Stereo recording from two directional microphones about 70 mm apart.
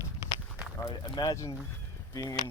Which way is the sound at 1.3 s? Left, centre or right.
Left.